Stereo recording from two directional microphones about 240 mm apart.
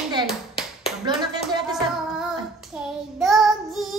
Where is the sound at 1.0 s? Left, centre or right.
Centre.